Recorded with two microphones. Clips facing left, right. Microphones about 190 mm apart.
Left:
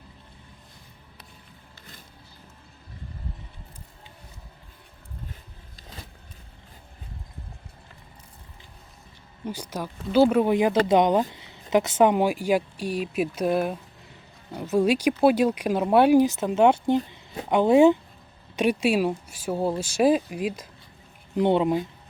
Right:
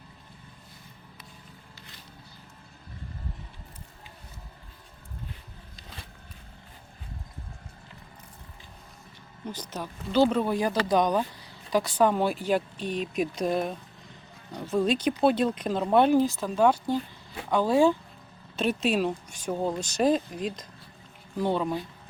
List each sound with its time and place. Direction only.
9.5 s speech: 10° left (ahead or behind)
10.5 s speech: 20° left (ahead or behind)
21.3 s speech: 20° left (ahead or behind)